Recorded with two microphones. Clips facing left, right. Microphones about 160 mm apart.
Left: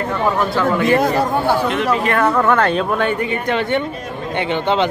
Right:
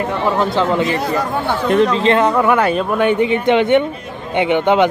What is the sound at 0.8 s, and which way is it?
Speech, 50° left (ahead or behind).